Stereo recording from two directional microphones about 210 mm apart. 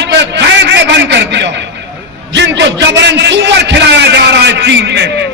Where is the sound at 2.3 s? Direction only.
55° right (ahead or behind).